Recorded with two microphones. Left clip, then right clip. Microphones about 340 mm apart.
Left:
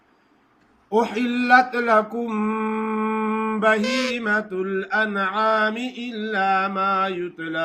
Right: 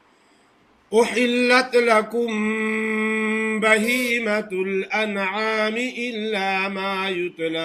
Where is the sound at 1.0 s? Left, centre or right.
Centre.